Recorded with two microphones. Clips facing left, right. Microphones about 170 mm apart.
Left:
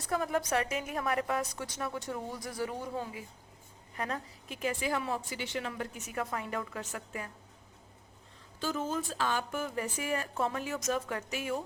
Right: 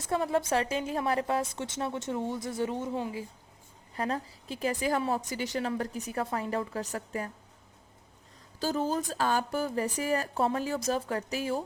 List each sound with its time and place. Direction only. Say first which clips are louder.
0.1 s a woman's voice: right 3 dB; 30° right (ahead or behind)
8.6 s a woman's voice: right 4 dB; 35° right (ahead or behind)